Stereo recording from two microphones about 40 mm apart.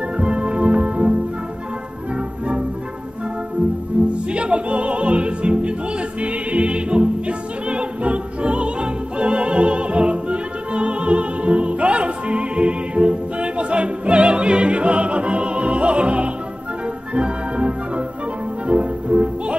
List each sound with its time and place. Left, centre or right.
0.2 s music: right
2.1 s music: right
3.9 s music: right
4.3 s music: right